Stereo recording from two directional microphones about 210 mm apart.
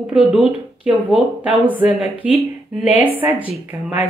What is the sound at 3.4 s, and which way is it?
Speech, 25° left (ahead or behind).